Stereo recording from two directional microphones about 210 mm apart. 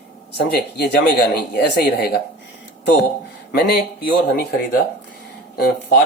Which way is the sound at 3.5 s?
50° left (ahead or behind).